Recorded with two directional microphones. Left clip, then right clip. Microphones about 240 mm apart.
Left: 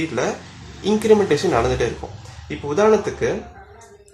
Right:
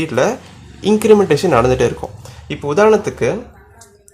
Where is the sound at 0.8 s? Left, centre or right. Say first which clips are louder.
Right 5 dB; right.